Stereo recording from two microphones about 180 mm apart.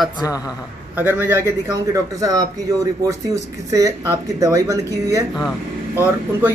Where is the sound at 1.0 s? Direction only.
10° right (ahead or behind).